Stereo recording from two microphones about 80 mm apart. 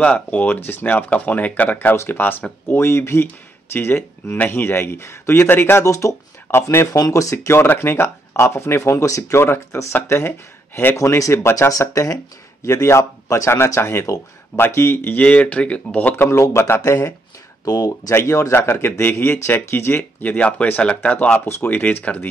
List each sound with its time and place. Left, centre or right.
0.0 s speech: centre
11.0 s speech: left
15.2 s speech: centre
16.5 s speech: left
17.6 s speech: left
18.1 s speech: left; by 22.3 s centre